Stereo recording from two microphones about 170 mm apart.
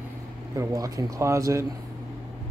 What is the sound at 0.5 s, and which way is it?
A man's voice, 20° right (ahead or behind).